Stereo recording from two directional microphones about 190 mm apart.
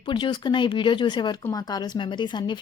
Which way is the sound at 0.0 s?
25° left (ahead or behind).